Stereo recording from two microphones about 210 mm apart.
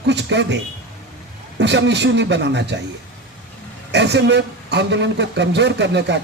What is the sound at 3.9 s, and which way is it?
Speech, 55° right (ahead or behind).